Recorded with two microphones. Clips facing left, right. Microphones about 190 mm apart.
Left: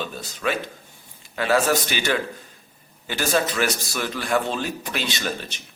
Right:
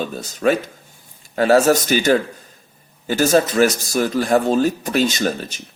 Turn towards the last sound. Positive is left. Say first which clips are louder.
# right 7 dB
turn(degrees=-45)  # may be behind; listen again after turning